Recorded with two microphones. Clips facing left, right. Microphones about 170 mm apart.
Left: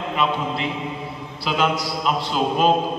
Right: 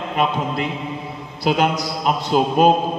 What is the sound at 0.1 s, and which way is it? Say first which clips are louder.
A man's voice: right 2 dB; 45° right (ahead or behind).